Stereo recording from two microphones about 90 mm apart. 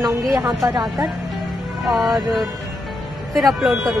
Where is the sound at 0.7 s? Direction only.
40° right (ahead or behind).